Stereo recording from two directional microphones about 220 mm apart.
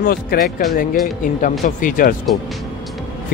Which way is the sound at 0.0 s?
40° left (ahead or behind).